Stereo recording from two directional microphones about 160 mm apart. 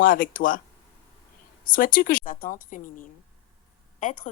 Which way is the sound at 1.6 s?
60° left (ahead or behind).